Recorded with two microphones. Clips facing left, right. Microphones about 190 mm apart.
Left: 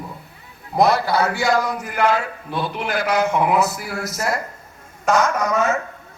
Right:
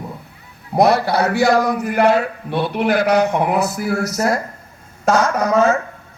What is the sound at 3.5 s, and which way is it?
A man's voice, 40° right (ahead or behind).